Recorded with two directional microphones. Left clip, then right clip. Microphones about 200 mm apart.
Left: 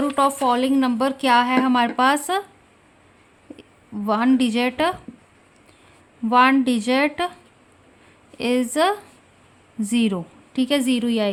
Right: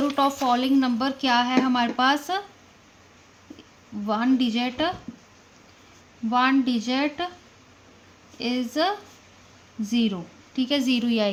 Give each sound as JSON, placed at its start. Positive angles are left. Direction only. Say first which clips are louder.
{"t": 0.0, "sound": "speech", "louder": "left 3 dB", "side_deg": 20}
{"t": 4.0, "sound": "a woman's voice", "louder": "left 4 dB", "side_deg": 35}
{"t": 6.3, "sound": "a woman's voice", "louder": "left 6 dB", "side_deg": 35}
{"t": 8.4, "sound": "a woman's voice", "louder": "left 5 dB", "side_deg": 35}